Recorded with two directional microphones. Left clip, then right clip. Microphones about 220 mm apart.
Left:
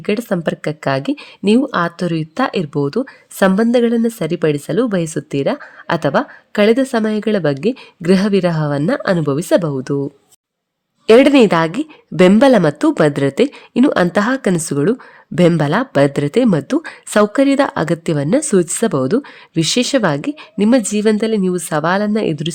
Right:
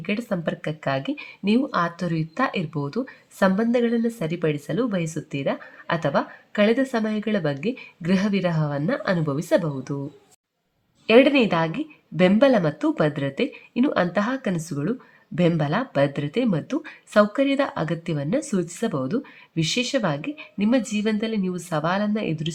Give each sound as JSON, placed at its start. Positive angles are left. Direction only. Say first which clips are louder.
{"t": 0.0, "sound": "speech", "louder": "left 9 dB", "side_deg": 45}
{"t": 11.0, "sound": "speech", "louder": "left 8 dB", "side_deg": 50}